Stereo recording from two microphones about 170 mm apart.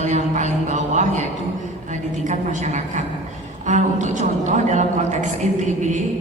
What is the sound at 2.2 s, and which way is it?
A woman's voice, 45° right (ahead or behind).